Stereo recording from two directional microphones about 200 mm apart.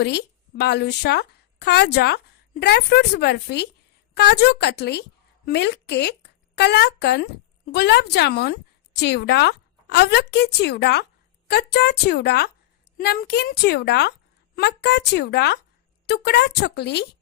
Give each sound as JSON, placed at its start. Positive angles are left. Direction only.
{"t": 0.0, "sound": "a woman's voice", "side_deg": 55}